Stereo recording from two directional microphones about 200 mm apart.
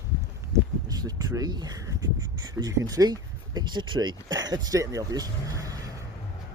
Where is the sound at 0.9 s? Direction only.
20° right (ahead or behind).